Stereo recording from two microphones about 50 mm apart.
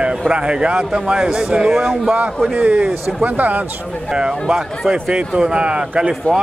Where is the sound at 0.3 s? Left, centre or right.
Right.